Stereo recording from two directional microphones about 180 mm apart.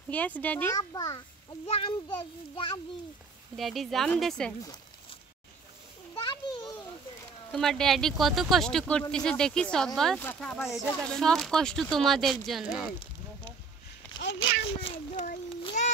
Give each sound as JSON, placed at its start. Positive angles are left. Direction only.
{"t": 0.1, "sound": "speech", "side_deg": 10}
{"t": 0.7, "sound": "child singing", "side_deg": 20}
{"t": 3.5, "sound": "speech", "side_deg": 0}
{"t": 6.1, "sound": "children playing", "side_deg": 25}
{"t": 7.5, "sound": "speech", "side_deg": 5}
{"t": 14.8, "sound": "a child's voice", "side_deg": 30}
{"t": 15.8, "sound": "child singing", "side_deg": 40}